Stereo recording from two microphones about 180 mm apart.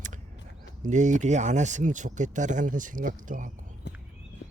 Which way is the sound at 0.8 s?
45° right (ahead or behind).